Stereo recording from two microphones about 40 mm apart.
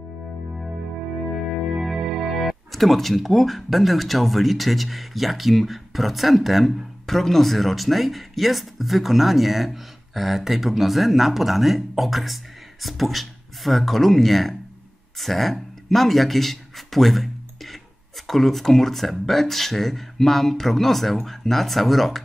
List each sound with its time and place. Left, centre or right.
1.8 s music: centre
2.0 s speech: centre